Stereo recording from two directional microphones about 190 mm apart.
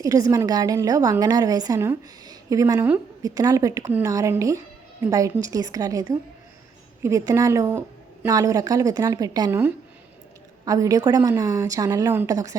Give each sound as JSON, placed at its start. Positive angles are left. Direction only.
{"t": 0.0, "sound": "a woman's voice", "side_deg": -15}